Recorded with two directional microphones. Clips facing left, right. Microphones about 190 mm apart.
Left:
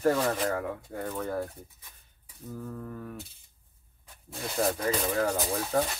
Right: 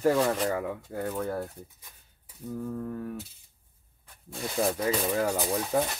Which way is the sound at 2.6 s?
5° right (ahead or behind).